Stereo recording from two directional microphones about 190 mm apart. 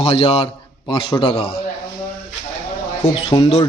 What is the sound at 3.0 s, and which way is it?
Speech, 25° left (ahead or behind).